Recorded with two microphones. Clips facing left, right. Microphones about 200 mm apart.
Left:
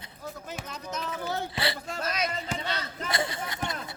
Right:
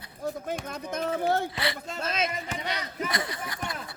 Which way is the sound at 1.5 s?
30° left (ahead or behind).